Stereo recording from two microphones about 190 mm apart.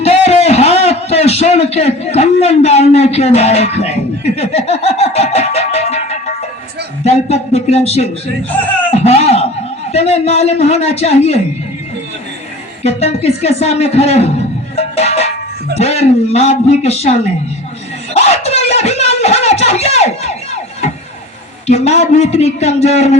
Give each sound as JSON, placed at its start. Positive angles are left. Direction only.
{"t": 0.0, "sound": "a man's voice", "side_deg": 35}
{"t": 4.4, "sound": "music", "side_deg": 35}
{"t": 7.0, "sound": "speech", "side_deg": 35}
{"t": 12.8, "sound": "speech", "side_deg": 35}
{"t": 14.8, "sound": "music", "side_deg": 35}
{"t": 15.8, "sound": "speech", "side_deg": 35}
{"t": 18.1, "sound": "a sound", "side_deg": 35}
{"t": 21.7, "sound": "speech", "side_deg": 35}